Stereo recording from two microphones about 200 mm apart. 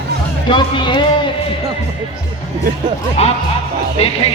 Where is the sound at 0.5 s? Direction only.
25° left (ahead or behind).